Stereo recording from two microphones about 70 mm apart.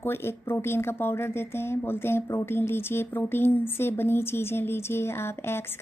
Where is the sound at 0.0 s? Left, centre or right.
Left.